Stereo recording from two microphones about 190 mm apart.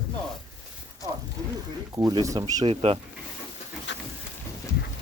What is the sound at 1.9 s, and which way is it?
Speech, 20° right (ahead or behind).